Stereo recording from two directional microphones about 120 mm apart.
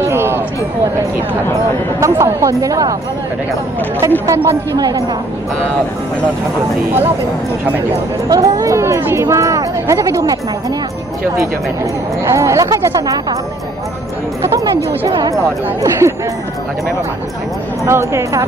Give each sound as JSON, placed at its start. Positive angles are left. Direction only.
{"t": 0.0, "sound": "a sound", "side_deg": -20}
{"t": 2.0, "sound": "speech", "side_deg": -25}
{"t": 4.0, "sound": "speech", "side_deg": -25}
{"t": 8.3, "sound": "speech", "side_deg": -30}
{"t": 12.3, "sound": "speech", "side_deg": -25}
{"t": 14.4, "sound": "speech", "side_deg": -25}
{"t": 17.8, "sound": "speech", "side_deg": -25}